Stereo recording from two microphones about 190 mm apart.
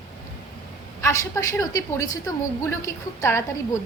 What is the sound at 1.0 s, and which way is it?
A woman's voice, 15° left (ahead or behind).